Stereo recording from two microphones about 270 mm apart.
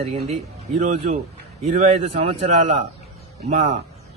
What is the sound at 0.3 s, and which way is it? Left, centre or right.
A man's voice, right.